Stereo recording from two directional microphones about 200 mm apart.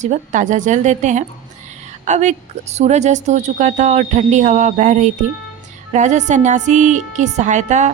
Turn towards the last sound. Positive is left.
turn(degrees=-35)  # may be behind; listen again after turning